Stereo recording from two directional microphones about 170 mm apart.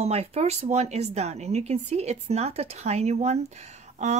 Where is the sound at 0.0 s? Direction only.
35° right (ahead or behind).